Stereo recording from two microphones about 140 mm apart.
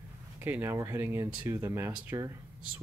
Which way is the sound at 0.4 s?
15° right (ahead or behind).